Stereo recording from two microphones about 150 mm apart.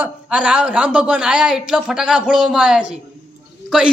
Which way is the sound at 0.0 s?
5° right (ahead or behind).